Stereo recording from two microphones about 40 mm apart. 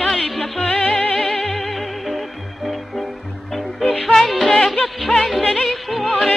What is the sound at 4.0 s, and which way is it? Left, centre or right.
Music, centre.